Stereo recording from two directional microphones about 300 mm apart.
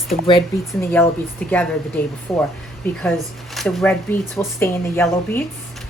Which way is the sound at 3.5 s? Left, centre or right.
Centre.